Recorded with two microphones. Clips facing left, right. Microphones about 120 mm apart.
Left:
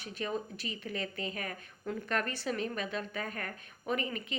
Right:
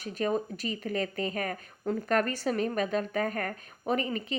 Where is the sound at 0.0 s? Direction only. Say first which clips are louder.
Right 7 dB; 45° right (ahead or behind).